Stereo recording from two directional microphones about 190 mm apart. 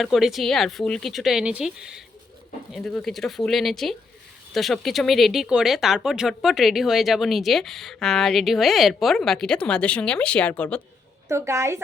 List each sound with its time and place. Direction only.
0.0 s speech: centre (ahead or behind)
11.3 s a woman's voice: 15° right (ahead or behind)